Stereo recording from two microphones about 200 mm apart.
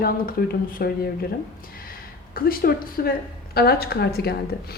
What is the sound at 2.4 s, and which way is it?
A woman's voice, 45° left (ahead or behind).